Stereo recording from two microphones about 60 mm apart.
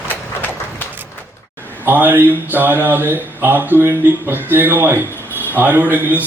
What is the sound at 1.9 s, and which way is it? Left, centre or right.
Speech, right.